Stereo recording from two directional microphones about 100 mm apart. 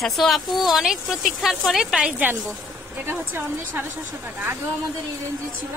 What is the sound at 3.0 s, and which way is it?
Speech, 20° right (ahead or behind).